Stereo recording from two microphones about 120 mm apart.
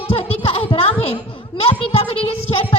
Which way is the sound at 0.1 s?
55° left (ahead or behind).